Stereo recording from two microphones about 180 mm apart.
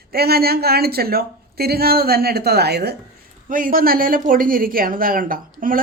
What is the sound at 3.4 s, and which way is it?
Speech, 50° right (ahead or behind).